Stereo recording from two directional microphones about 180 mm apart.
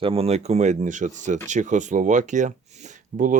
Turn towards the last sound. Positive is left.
turn(degrees=-45)  # may be behind; listen again after turning